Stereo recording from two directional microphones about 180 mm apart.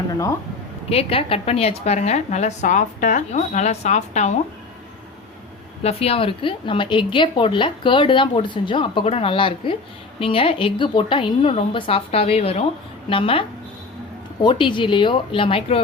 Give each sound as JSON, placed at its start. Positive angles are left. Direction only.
{"t": 0.1, "sound": "a sound", "side_deg": 20}
{"t": 0.9, "sound": "a woman's voice", "side_deg": 30}
{"t": 5.8, "sound": "a woman's voice", "side_deg": 35}
{"t": 14.4, "sound": "a woman's voice", "side_deg": 25}